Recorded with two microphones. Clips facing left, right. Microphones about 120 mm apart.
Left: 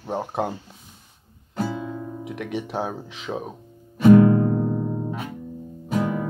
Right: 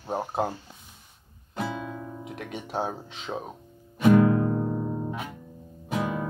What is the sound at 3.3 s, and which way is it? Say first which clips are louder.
Speech: left 4 dB; 5° left (ahead or behind).